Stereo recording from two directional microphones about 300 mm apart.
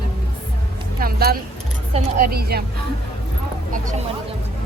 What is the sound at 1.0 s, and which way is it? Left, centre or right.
A woman's voice, right.